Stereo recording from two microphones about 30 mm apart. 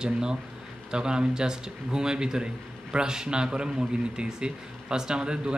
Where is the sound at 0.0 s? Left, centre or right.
Right.